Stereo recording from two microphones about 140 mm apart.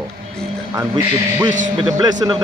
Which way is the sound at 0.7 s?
20° right (ahead or behind).